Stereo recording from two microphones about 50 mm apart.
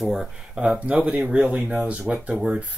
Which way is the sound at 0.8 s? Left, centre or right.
Right.